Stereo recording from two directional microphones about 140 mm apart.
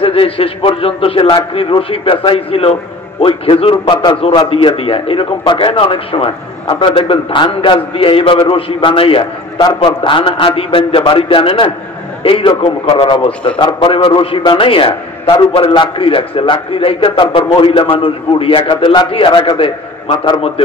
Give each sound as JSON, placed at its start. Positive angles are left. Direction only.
{"t": 0.0, "sound": "a man's voice", "side_deg": 40}
{"t": 3.9, "sound": "a man's voice", "side_deg": 30}
{"t": 4.5, "sound": "a man's voice", "side_deg": 40}